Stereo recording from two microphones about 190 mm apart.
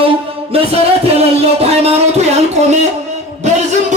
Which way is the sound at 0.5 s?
30° right (ahead or behind).